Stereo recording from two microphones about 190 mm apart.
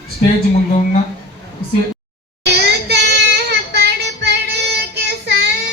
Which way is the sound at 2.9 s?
60° right (ahead or behind).